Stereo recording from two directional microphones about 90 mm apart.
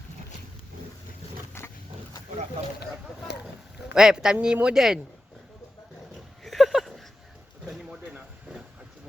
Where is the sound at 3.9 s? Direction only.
5° right (ahead or behind).